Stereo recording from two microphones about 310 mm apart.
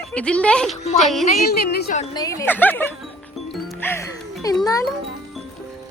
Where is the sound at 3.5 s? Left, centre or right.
Centre.